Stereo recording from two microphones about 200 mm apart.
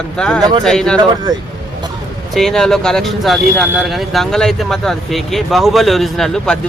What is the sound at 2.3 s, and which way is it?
Speech, centre (ahead or behind).